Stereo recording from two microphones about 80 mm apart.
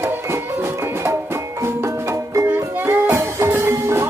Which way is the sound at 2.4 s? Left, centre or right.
Right.